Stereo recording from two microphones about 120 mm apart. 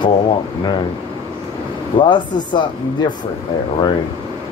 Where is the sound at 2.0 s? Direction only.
40° left (ahead or behind).